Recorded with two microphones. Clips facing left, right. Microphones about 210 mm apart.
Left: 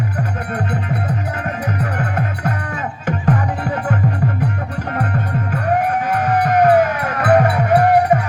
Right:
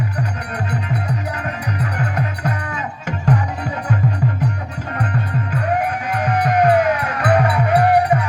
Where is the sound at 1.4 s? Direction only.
50° left (ahead or behind).